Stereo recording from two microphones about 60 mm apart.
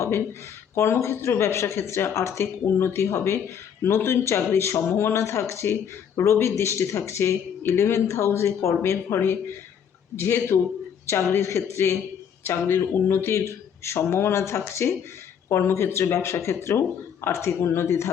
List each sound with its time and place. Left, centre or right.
0.8 s speech: left
12.5 s speech: left